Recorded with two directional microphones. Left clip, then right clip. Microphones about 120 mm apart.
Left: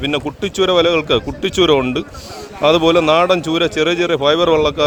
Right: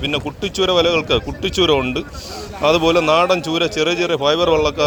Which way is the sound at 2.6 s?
55° left (ahead or behind).